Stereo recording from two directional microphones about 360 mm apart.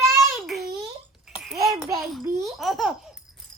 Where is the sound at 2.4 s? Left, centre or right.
Centre.